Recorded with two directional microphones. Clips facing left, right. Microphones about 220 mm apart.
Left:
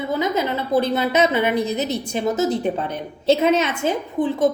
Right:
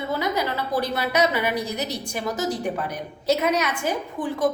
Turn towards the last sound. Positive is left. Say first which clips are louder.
# left 5 dB
turn(degrees=20)  # may be behind; listen again after turning